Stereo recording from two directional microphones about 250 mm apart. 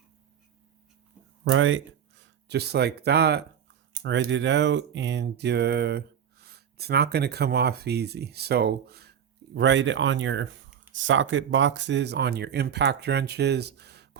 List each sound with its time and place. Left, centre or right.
1.5 s speech: right